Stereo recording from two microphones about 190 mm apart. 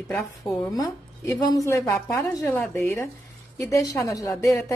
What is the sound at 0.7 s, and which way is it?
A woman's voice, 15° left (ahead or behind).